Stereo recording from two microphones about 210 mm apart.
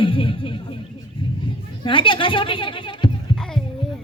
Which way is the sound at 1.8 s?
25° left (ahead or behind).